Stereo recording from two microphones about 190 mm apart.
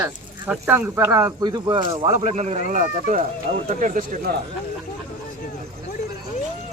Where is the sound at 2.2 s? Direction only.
35° right (ahead or behind).